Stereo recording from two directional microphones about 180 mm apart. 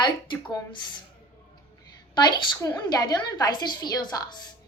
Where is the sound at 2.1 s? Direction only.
25° left (ahead or behind).